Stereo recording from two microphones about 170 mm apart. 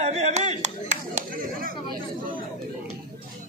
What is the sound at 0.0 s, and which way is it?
Clapping, 40° right (ahead or behind).